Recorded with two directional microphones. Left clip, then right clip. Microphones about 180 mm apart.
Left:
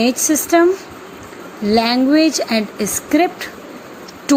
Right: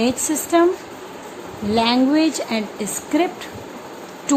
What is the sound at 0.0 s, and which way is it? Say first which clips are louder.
Speech: left 5 dB; 20° left (ahead or behind).